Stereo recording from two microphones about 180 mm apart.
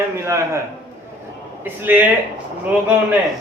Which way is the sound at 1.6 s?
10° right (ahead or behind).